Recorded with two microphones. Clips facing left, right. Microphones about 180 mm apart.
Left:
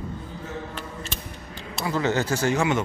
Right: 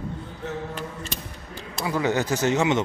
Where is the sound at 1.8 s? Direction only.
15° right (ahead or behind).